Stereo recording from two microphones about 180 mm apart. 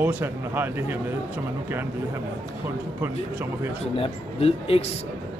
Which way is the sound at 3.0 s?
15° right (ahead or behind).